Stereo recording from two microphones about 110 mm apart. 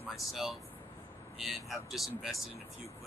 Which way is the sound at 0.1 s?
Centre (ahead or behind).